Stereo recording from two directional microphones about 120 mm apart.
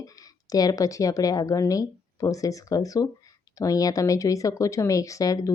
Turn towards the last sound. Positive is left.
turn(degrees=30)  # may be behind; listen again after turning